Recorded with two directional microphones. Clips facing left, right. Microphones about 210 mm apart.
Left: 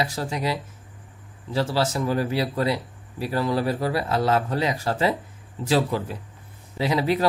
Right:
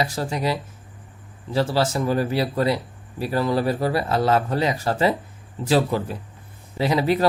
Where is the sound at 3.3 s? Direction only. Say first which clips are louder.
Right 2 dB; 30° right (ahead or behind).